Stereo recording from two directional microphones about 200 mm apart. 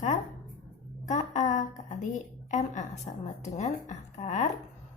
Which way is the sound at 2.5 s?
35° left (ahead or behind).